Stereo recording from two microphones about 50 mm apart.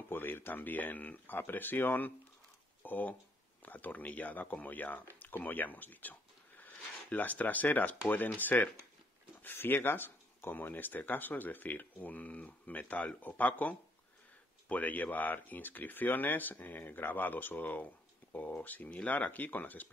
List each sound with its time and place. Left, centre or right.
0.1 s speech: left